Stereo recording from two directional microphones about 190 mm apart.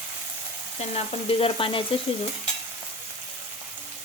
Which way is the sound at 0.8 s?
35° left (ahead or behind).